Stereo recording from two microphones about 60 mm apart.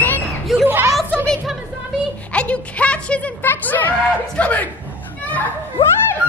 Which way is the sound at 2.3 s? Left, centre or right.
Centre.